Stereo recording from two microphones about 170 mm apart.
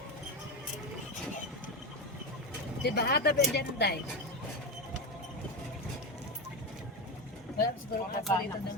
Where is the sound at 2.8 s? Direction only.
70° left (ahead or behind).